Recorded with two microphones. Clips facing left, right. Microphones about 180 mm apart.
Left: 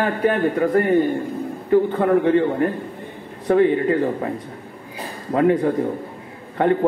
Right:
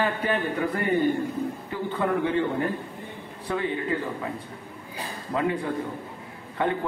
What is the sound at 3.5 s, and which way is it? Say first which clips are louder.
Speech: left 11 dB; 55° left (ahead or behind).